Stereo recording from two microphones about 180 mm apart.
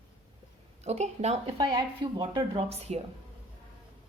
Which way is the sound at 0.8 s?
35° right (ahead or behind).